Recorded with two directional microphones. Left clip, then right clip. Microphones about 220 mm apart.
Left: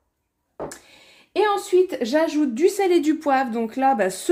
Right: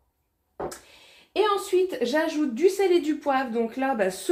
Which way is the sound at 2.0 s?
50° left (ahead or behind).